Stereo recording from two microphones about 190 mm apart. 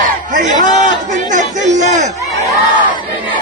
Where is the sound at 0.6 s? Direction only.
40° right (ahead or behind).